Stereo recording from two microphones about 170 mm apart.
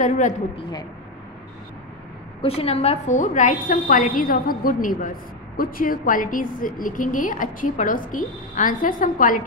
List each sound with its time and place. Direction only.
0.6 s a woman's voice: 25° left (ahead or behind)
2.4 s a woman's voice: 35° left (ahead or behind); by 9.4 s 50° left (ahead or behind)